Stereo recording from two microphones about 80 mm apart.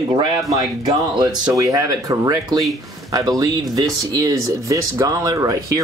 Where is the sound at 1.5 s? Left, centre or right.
Right.